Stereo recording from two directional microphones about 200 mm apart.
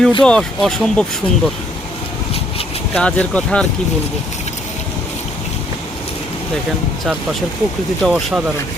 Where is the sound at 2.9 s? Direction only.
5° left (ahead or behind).